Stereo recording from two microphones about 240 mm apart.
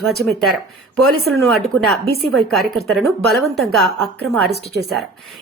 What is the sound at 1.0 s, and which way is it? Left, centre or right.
Speech, right.